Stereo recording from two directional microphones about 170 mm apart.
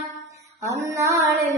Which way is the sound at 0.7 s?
20° right (ahead or behind).